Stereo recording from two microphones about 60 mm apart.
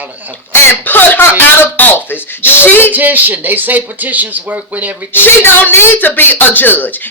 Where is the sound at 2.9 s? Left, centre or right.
Right.